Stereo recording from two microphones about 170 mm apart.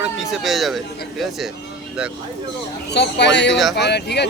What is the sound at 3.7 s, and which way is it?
Speech, 80° left.